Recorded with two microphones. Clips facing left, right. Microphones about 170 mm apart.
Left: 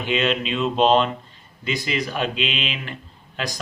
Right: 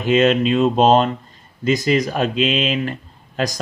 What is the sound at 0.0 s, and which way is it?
Speech, 45° right (ahead or behind).